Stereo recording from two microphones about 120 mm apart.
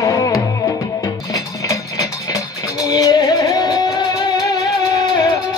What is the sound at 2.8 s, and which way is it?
Music, 30° left (ahead or behind).